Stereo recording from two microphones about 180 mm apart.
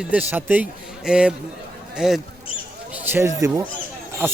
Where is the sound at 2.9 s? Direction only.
10° right (ahead or behind).